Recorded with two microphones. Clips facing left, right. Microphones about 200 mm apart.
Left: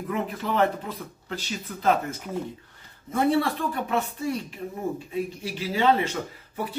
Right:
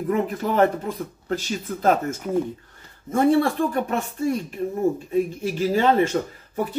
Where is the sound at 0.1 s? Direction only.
45° right (ahead or behind).